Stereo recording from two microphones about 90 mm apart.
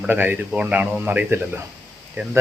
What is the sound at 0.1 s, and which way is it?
Speech, 20° right (ahead or behind).